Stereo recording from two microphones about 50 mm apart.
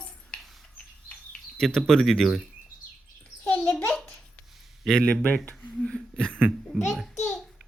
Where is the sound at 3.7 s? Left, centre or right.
Left.